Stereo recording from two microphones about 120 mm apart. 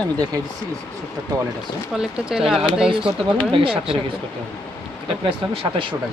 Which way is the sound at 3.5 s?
45° right (ahead or behind).